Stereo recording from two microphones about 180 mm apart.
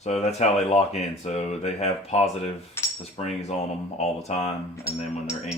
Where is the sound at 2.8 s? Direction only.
15° left (ahead or behind).